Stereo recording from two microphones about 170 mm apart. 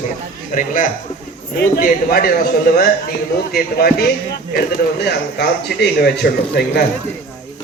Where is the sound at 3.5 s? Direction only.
65° left (ahead or behind).